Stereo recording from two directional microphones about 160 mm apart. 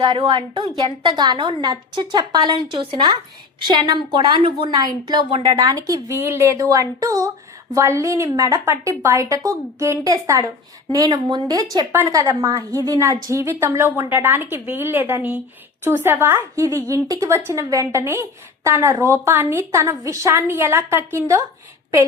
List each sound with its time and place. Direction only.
0.0 s a woman's voice: 30° right (ahead or behind)